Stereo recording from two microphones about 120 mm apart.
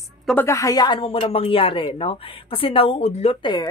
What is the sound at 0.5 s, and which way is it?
Speech, 30° left (ahead or behind).